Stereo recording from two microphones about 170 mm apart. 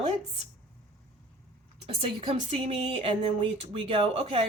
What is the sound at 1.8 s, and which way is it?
Speech, 35° right (ahead or behind).